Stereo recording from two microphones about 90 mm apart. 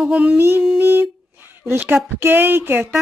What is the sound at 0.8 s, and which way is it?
Humming, 25° right (ahead or behind).